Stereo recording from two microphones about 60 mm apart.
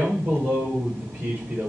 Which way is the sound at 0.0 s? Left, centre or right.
Centre.